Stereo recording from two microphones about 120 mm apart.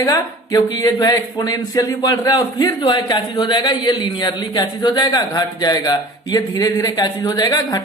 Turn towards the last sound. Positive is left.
turn(degrees=30)  # may be behind; listen again after turning